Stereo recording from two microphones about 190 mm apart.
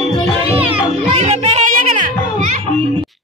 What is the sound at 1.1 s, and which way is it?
Music, 35° right (ahead or behind).